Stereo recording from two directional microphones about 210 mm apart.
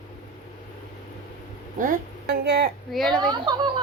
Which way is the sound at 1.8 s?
45° right (ahead or behind).